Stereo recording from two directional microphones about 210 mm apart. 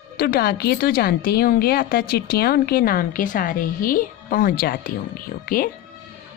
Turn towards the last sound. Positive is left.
turn(degrees=40)  # may be behind; listen again after turning